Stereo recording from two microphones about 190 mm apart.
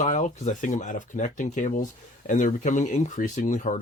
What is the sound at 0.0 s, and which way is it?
Speech, 40° left (ahead or behind).